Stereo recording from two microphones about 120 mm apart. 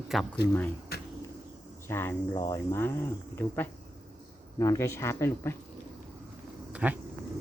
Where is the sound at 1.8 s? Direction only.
20° left (ahead or behind).